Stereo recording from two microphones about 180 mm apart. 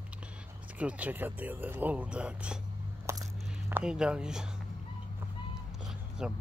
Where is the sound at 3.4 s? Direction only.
5° right (ahead or behind).